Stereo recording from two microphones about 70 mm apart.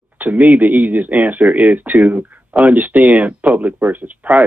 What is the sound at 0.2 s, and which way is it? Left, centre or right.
Speech, right.